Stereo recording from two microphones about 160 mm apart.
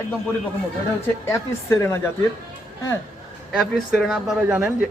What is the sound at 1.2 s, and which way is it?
Speech, 15° left (ahead or behind).